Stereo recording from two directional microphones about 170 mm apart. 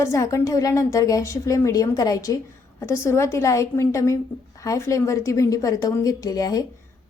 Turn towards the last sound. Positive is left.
turn(degrees=20)  # may be behind; listen again after turning